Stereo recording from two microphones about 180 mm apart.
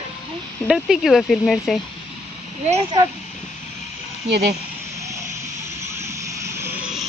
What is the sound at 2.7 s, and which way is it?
Speech, 30° right (ahead or behind).